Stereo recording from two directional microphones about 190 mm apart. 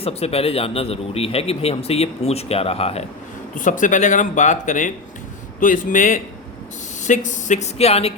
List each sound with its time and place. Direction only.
0.0 s a man's voice: 30° left (ahead or behind)
3.5 s a man's voice: 45° left (ahead or behind)